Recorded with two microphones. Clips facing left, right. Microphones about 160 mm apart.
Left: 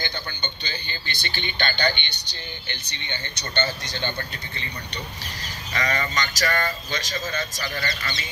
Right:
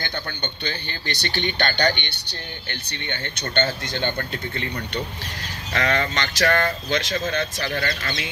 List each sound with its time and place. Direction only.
0.0 s speech: 60° right (ahead or behind)
5.7 s speech: 60° right (ahead or behind)